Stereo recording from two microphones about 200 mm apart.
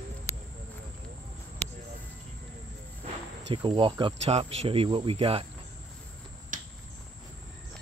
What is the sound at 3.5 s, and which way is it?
Speech, 25° right (ahead or behind).